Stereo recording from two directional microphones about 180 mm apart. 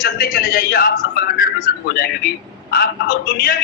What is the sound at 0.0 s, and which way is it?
A man's voice, 55° left (ahead or behind).